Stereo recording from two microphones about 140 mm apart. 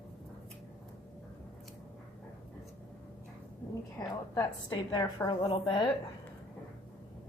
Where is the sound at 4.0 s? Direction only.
25° left (ahead or behind).